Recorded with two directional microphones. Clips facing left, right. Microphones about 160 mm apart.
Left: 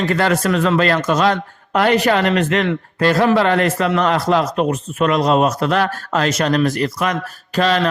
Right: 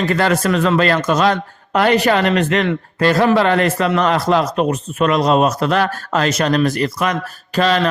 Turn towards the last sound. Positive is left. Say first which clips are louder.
# right 1 dB
turn(degrees=-35)  # may be behind; listen again after turning